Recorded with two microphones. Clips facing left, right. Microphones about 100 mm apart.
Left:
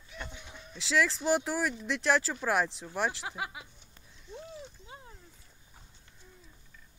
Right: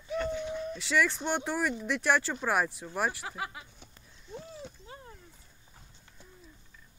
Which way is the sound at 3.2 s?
10° left (ahead or behind).